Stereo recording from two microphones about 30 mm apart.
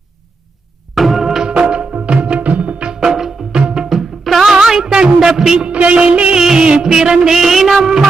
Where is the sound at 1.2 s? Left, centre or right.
Centre.